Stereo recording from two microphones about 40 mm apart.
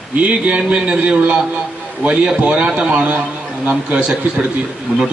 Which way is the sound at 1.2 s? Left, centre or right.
Right.